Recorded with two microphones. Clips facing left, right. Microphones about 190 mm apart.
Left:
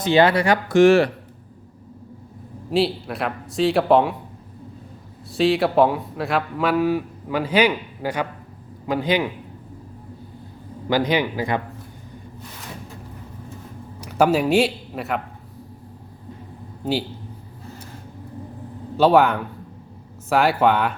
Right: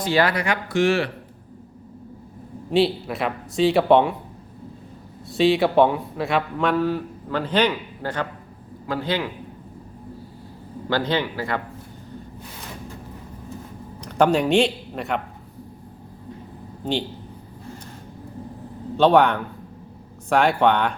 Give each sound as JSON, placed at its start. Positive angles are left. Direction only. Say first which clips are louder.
{"t": 0.0, "sound": "speech", "louder": "left 4 dB", "side_deg": 20}
{"t": 2.6, "sound": "a man's voice", "louder": "right 1 dB", "side_deg": 0}
{"t": 5.3, "sound": "a man's voice", "louder": "right 1 dB", "side_deg": 0}
{"t": 10.8, "sound": "speech", "louder": "left 3 dB", "side_deg": 15}
{"t": 14.0, "sound": "speech", "louder": "left 1 dB", "side_deg": 5}
{"t": 18.9, "sound": "a man's voice", "louder": "even", "side_deg": 5}